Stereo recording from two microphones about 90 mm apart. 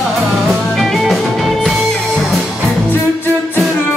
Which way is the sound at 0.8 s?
Centre (ahead or behind).